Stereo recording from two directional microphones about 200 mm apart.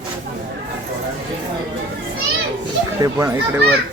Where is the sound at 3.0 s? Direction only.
15° right (ahead or behind).